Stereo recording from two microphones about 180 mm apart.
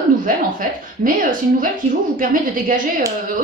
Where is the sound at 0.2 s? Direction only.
50° right (ahead or behind).